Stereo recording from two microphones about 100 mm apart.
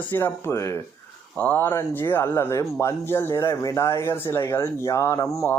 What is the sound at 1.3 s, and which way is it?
Speech, 15° left (ahead or behind).